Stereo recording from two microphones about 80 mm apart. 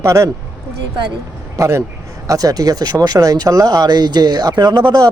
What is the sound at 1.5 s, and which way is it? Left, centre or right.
Speech, right.